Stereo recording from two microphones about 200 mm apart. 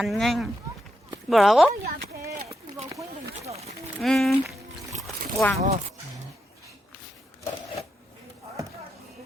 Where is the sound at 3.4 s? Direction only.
30° right (ahead or behind).